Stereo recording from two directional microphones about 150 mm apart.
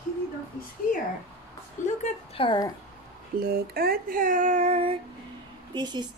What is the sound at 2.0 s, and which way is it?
Speech, 35° left (ahead or behind).